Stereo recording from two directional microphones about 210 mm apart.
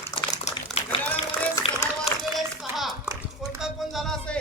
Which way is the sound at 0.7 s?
30° left (ahead or behind).